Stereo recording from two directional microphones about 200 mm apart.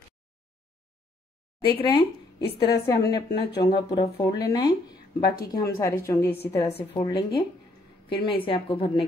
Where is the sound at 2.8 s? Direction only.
15° left (ahead or behind).